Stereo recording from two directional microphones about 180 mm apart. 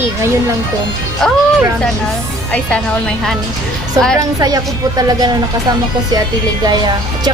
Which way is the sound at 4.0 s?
20° right (ahead or behind).